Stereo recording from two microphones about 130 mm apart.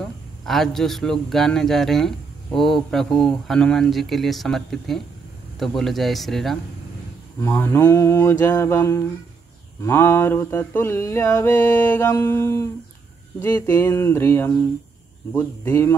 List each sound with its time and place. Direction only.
0.0 s a man's voice: 5° left (ahead or behind)
7.4 s mantra: 15° left (ahead or behind)